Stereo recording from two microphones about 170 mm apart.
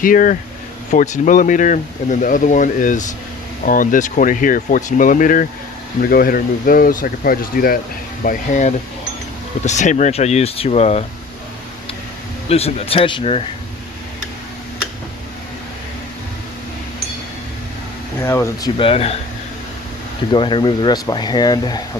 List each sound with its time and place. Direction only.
0.0 s speech: 55° left (ahead or behind)
12.5 s speech: 35° left (ahead or behind)
18.2 s speech: 15° left (ahead or behind)
18.8 s speech: 35° left (ahead or behind)
20.3 s speech: 30° left (ahead or behind)